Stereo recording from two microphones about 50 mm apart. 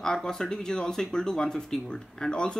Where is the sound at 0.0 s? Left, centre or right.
Centre.